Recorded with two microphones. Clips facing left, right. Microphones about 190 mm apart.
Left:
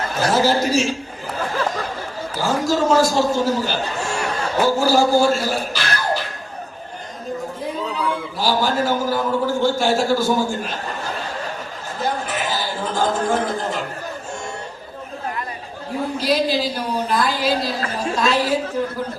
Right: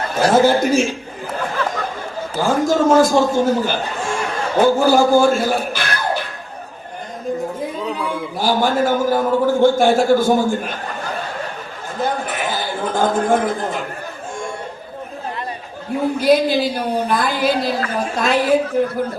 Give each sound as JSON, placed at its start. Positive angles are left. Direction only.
{"t": 0.2, "sound": "a man's voice", "side_deg": -55}
{"t": 2.4, "sound": "a man's voice", "side_deg": -50}
{"t": 8.4, "sound": "a man's voice", "side_deg": -55}
{"t": 11.9, "sound": "a sound", "side_deg": -55}
{"t": 16.1, "sound": "a woman's voice", "side_deg": -55}